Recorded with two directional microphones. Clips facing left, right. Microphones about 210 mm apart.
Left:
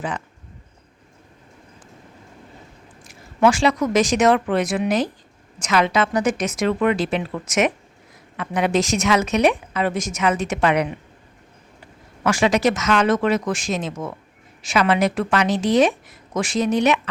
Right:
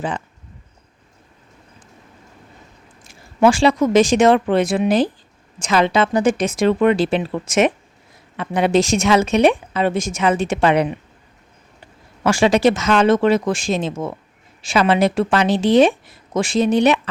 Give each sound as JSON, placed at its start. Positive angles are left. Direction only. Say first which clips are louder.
{"t": 3.1, "sound": "a woman's voice", "louder": "right 3 dB", "side_deg": -30}
{"t": 12.2, "sound": "a woman's voice", "louder": "right 4 dB", "side_deg": -30}